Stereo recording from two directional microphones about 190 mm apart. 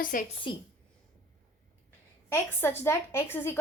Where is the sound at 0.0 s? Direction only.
45° left (ahead or behind).